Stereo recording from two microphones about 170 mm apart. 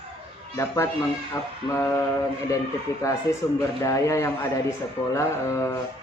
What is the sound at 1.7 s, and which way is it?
Speech, 15° left (ahead or behind).